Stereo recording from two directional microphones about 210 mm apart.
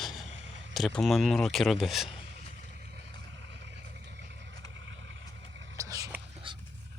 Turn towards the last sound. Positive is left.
turn(degrees=-15)  # may be behind; listen again after turning